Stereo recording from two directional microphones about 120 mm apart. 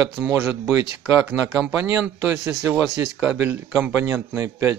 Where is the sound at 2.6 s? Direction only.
Centre (ahead or behind).